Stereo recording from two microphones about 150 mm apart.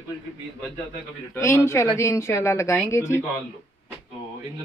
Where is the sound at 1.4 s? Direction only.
20° left (ahead or behind).